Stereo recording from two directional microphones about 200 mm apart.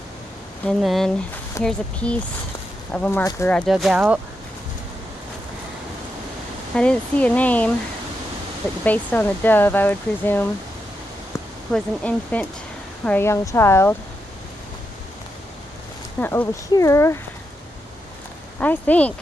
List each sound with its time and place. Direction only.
0.7 s speech: centre (ahead or behind)
3.7 s speech: centre (ahead or behind)
6.7 s speech: 5° left (ahead or behind)
8.8 s speech: 10° left (ahead or behind)
11.7 s speech: 5° left (ahead or behind)
16.2 s speech: 10° left (ahead or behind)
18.6 s speech: 10° left (ahead or behind)